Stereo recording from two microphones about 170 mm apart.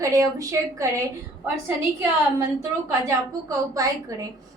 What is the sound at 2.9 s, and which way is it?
A woman's voice, 20° right (ahead or behind).